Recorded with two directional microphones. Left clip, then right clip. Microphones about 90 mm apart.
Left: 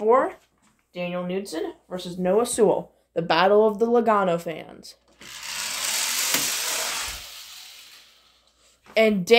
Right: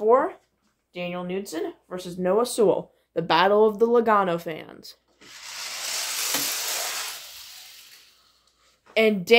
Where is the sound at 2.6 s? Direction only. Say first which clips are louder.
Left 1 dB; 45° right (ahead or behind).